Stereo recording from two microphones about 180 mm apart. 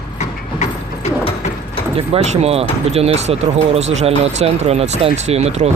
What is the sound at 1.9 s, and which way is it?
Speech, 35° right (ahead or behind).